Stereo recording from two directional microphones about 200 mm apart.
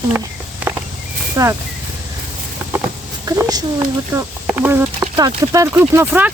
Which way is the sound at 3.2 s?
15° right (ahead or behind).